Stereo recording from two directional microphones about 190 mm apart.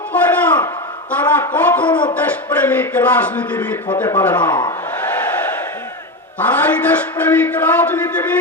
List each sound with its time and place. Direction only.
0.1 s a sound: 10° left (ahead or behind)
1.1 s speech: 10° left (ahead or behind)
1.9 s speech: 25° left (ahead or behind)
2.1 s a man's voice: 10° left (ahead or behind)
6.4 s a man's voice: 10° left (ahead or behind)